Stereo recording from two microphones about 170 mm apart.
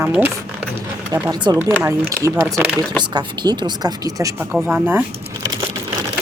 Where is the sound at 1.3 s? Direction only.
25° right (ahead or behind).